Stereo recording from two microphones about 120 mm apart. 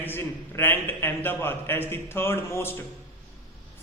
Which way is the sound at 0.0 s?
20° left (ahead or behind).